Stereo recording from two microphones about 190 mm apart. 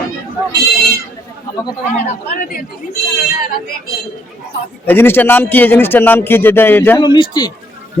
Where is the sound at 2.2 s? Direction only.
45° left (ahead or behind).